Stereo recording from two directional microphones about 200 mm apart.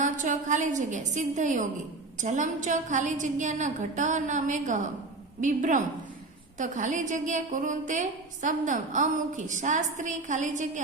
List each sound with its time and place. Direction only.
0.0 s a woman's voice: 40° right (ahead or behind)